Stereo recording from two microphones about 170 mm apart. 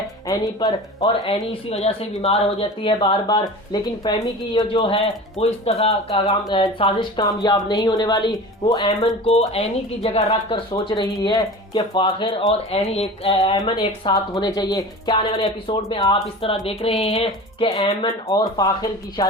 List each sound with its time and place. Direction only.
0.3 s speech: 20° left (ahead or behind)
5.4 s speech: 35° left (ahead or behind)
10.2 s speech: 25° left (ahead or behind)
17.7 s speech: 20° left (ahead or behind)